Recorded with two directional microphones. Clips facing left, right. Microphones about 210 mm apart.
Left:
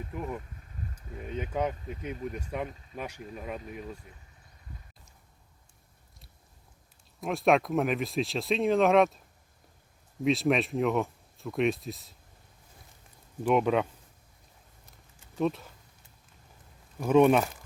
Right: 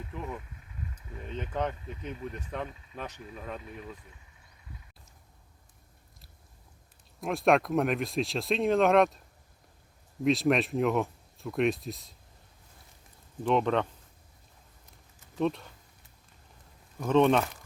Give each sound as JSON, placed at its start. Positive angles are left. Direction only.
{"t": 0.1, "sound": "speech", "side_deg": 10}
{"t": 7.2, "sound": "speech", "side_deg": 0}
{"t": 10.2, "sound": "speech", "side_deg": 0}
{"t": 13.4, "sound": "speech", "side_deg": 10}
{"t": 15.4, "sound": "speech", "side_deg": 0}
{"t": 17.0, "sound": "speech", "side_deg": 10}